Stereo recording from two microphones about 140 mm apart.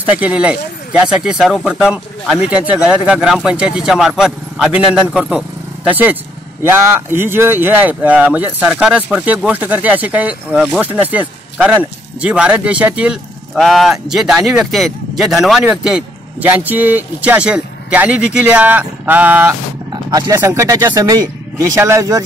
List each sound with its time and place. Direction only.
0.0 s speech: 10° right (ahead or behind)
20.1 s speech: 25° right (ahead or behind)